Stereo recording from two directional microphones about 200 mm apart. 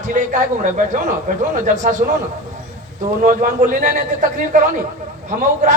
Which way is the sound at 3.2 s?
40° right (ahead or behind).